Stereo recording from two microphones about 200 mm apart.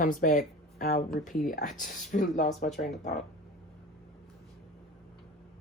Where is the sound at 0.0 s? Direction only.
45° left (ahead or behind).